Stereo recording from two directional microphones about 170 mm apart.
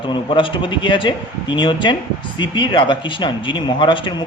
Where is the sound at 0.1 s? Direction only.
30° left (ahead or behind).